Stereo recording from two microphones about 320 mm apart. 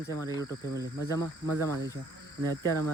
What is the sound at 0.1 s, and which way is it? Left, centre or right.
Speech, centre.